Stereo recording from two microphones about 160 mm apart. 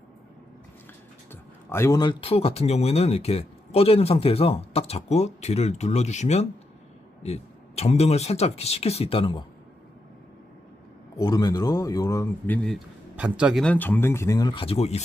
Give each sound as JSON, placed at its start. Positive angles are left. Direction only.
{"t": 1.3, "sound": "speech", "side_deg": 15}
{"t": 11.2, "sound": "speech", "side_deg": 25}
{"t": 13.1, "sound": "speech", "side_deg": -5}